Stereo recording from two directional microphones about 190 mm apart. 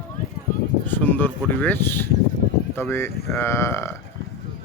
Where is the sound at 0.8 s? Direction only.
10° left (ahead or behind).